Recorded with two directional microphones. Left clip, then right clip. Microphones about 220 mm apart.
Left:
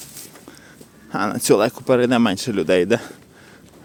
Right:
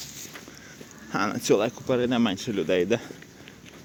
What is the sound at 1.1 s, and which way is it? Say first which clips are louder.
Speech: left 4 dB; 25° left (ahead or behind).